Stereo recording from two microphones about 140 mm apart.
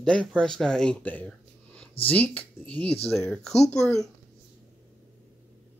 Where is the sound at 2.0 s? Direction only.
10° left (ahead or behind).